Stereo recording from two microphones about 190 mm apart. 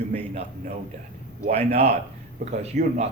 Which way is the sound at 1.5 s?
30° right (ahead or behind).